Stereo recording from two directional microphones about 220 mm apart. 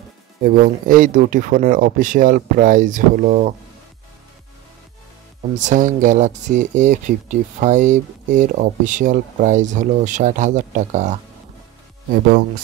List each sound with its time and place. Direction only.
0.4 s speech: 40° right (ahead or behind)
5.6 s speech: 35° right (ahead or behind)